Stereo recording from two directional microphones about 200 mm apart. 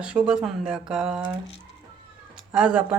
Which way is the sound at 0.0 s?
5° right (ahead or behind).